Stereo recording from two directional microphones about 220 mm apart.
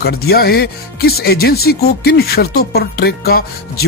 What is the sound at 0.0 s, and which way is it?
Speech, 45° left (ahead or behind).